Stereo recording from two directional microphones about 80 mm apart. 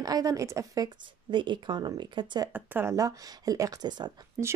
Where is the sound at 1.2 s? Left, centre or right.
Right.